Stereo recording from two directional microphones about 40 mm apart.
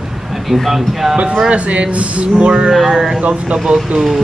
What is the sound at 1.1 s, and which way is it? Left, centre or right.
Speech, right.